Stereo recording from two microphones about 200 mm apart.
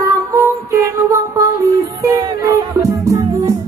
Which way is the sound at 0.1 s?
15° right (ahead or behind).